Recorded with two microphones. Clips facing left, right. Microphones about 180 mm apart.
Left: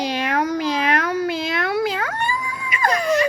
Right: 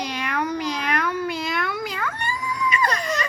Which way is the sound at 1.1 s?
85° left.